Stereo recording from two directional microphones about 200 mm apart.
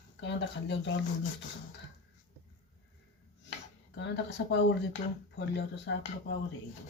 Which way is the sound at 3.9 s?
65° left (ahead or behind).